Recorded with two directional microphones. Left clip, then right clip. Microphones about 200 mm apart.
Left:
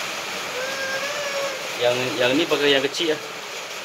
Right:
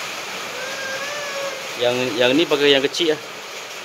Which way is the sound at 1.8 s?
50° right (ahead or behind).